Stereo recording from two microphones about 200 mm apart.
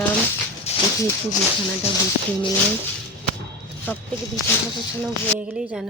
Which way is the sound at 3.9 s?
10° left (ahead or behind).